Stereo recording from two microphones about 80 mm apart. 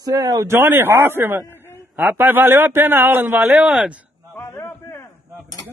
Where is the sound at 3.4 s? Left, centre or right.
Centre.